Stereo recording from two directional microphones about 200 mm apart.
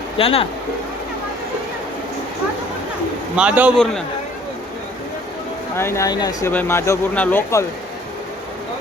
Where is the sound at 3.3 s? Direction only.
5° right (ahead or behind).